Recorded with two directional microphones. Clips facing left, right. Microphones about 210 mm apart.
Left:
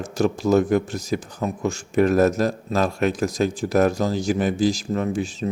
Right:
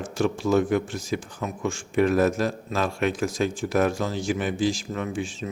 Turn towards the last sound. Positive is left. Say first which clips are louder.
# left 5 dB
turn(degrees=40)  # may be behind; listen again after turning